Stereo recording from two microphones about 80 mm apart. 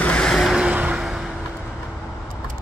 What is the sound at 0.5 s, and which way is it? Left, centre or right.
Vehicle, centre.